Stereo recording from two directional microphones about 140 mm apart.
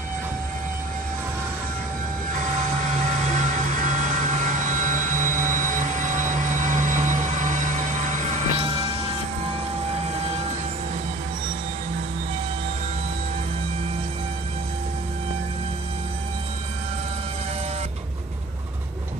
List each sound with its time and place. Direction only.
2.3 s vehicle: 60° right (ahead or behind)